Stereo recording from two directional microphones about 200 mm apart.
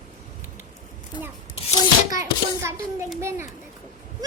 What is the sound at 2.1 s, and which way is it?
Speech, 15° right (ahead or behind).